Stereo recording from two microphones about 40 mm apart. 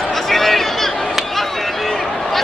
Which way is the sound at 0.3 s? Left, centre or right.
Centre.